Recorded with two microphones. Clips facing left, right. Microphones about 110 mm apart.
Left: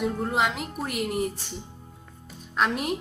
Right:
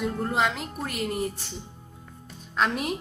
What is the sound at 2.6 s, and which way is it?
Speech, 5° left (ahead or behind).